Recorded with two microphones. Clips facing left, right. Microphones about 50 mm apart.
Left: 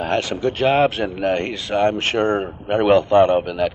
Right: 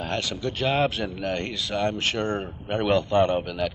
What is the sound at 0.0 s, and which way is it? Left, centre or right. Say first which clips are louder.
A man's voice: left 8 dB; left.